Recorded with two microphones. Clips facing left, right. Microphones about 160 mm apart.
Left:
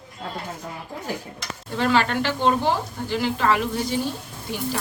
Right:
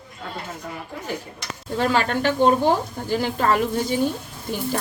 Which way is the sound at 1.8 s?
40° right (ahead or behind).